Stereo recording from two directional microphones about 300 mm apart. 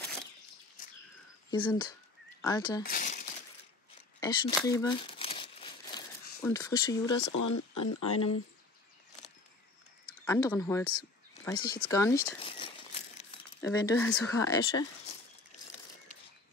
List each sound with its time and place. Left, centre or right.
1.5 s speech: centre
2.8 s a sound: left
4.2 s speech: centre
4.6 s crumpling: centre
7.3 s speech: left
10.2 s speech: centre
11.4 s crumpling: centre
13.8 s speech: centre